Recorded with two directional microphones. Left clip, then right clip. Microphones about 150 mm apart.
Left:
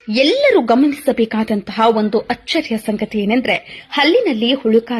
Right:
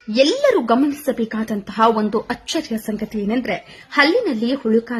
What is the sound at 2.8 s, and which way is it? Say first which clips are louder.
Speech: left 5 dB; 35° left (ahead or behind).